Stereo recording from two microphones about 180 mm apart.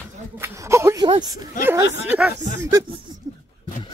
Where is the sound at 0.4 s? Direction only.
15° right (ahead or behind).